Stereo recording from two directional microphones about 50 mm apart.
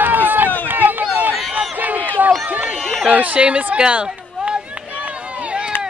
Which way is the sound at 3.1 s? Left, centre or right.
Right.